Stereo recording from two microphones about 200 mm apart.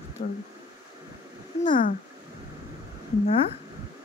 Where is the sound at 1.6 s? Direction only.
40° left (ahead or behind).